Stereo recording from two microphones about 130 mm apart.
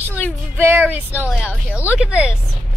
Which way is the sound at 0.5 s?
15° right (ahead or behind).